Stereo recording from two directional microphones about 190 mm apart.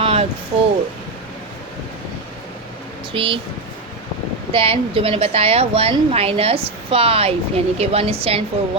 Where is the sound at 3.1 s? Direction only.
25° right (ahead or behind).